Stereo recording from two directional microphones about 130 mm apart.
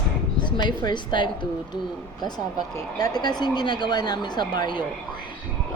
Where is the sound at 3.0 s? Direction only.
30° left (ahead or behind).